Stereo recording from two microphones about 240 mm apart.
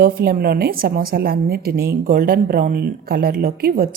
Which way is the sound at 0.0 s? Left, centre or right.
Right.